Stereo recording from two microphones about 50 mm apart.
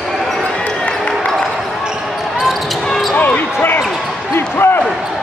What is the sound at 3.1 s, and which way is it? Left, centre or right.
Basketball bounce, left.